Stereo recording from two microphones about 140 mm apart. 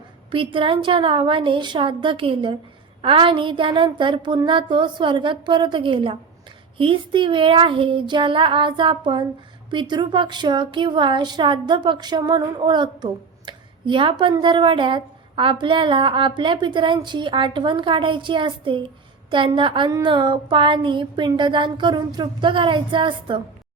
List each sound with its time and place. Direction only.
0.3 s a woman's voice: 40° right (ahead or behind)